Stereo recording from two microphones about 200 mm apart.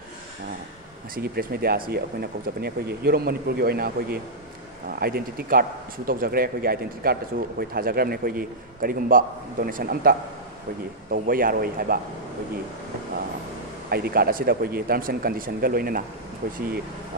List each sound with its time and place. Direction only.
1.1 s speech: 50° right (ahead or behind)
13.8 s speech: 50° right (ahead or behind)